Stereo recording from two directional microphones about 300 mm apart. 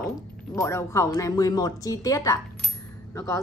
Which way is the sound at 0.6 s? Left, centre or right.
Centre.